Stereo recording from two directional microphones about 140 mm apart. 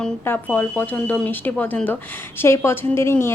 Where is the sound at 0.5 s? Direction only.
10° left (ahead or behind).